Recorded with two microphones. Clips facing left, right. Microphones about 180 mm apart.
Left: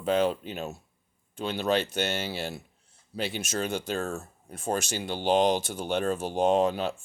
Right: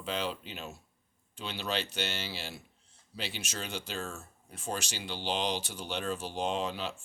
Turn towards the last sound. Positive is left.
turn(degrees=50)  # may be behind; listen again after turning